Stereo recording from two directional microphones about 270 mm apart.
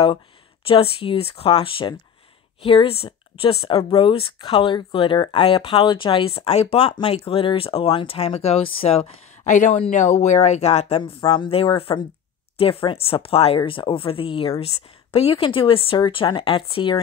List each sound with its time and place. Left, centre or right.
0.7 s speech: left